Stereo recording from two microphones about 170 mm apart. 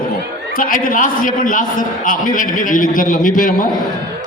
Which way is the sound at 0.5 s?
55° left (ahead or behind).